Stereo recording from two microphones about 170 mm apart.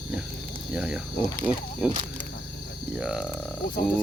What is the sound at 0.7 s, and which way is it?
Speech, centre (ahead or behind).